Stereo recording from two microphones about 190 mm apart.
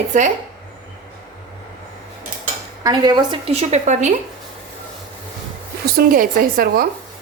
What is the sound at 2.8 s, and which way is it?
A woman's voice, 20° right (ahead or behind).